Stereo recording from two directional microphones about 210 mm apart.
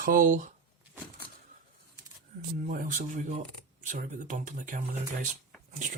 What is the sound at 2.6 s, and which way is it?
Speech, 40° right (ahead or behind).